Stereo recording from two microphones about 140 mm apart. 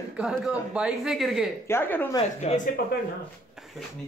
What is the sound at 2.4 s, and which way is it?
Speech, 65° left (ahead or behind).